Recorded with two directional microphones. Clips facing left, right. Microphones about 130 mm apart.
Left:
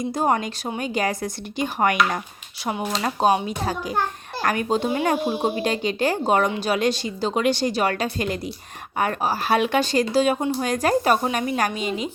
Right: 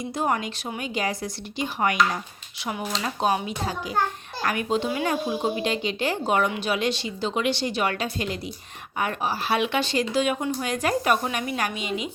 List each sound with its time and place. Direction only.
0.0 s speech: 40° left (ahead or behind)
2.9 s speech: 40° left (ahead or behind)
4.9 s speech: 30° left (ahead or behind)